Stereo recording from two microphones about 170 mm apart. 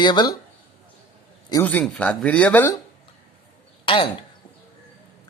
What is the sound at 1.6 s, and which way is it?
Speech, 5° left (ahead or behind).